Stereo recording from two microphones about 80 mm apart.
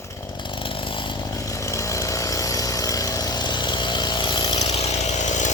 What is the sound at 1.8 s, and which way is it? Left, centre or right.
Vehicle, left.